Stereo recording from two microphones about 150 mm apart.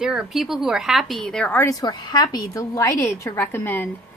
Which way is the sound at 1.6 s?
25° left (ahead or behind).